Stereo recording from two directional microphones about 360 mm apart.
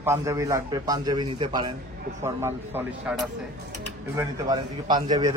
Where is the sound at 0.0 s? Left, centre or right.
Centre.